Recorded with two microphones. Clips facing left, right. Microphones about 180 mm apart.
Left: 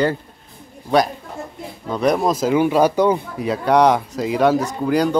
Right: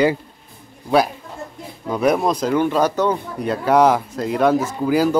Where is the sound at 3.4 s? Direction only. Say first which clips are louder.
Even; centre (ahead or behind).